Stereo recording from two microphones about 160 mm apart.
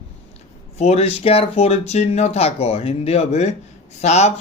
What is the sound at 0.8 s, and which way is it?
Speech, 40° left (ahead or behind).